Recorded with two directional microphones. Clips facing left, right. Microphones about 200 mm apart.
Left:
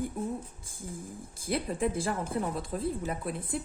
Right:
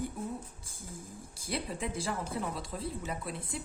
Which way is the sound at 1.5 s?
50° left (ahead or behind).